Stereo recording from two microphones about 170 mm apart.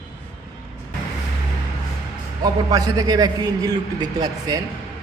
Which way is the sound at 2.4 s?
20° right (ahead or behind).